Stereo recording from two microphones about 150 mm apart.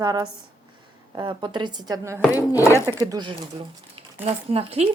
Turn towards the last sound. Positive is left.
turn(degrees=-40)  # may be behind; listen again after turning